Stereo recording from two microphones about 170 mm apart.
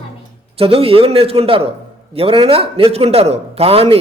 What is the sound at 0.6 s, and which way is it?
A man's voice, 35° right (ahead or behind).